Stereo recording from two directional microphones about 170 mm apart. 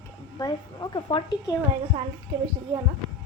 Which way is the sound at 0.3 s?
25° left (ahead or behind).